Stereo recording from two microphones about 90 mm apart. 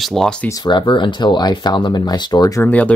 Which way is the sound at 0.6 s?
60° left (ahead or behind).